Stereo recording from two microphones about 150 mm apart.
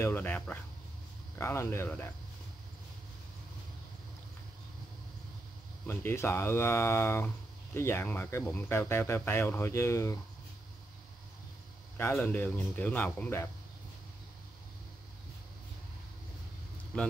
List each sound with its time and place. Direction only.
0.0 s speech: 15° left (ahead or behind)
5.9 s speech: 15° left (ahead or behind)
12.0 s speech: 15° left (ahead or behind)